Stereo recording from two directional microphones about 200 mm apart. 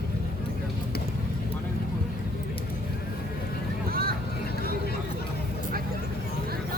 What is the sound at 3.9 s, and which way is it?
Vehicle, 50° right (ahead or behind).